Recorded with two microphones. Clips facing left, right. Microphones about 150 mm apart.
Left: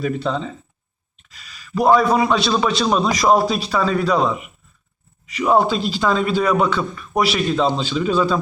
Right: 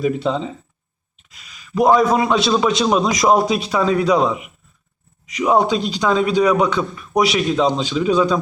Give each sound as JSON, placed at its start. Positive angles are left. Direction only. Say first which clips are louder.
{"t": 0.0, "sound": "speech", "louder": "right 3 dB", "side_deg": -10}
{"t": 1.3, "sound": "a sound", "louder": "left 1 dB", "side_deg": 0}
{"t": 1.8, "sound": "a man's voice", "louder": "right 1 dB", "side_deg": 0}